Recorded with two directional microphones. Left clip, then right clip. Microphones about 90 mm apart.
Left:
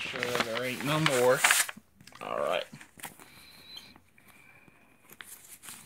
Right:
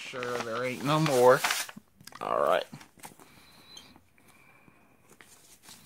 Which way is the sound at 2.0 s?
75° right (ahead or behind).